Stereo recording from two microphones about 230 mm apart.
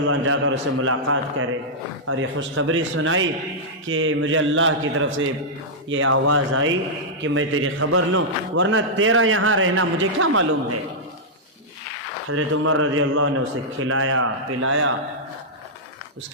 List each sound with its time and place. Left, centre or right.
0.0 s a man's voice: right
12.3 s a man's voice: right